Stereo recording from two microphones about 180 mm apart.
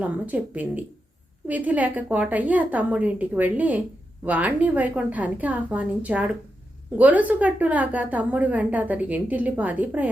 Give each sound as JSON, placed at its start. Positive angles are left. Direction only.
{"t": 0.0, "sound": "a woman's voice", "side_deg": -10}